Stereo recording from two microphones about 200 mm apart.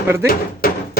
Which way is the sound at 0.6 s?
50° left (ahead or behind).